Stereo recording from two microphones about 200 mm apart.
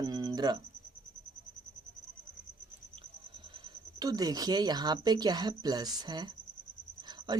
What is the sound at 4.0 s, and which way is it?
Speech, 20° right (ahead or behind).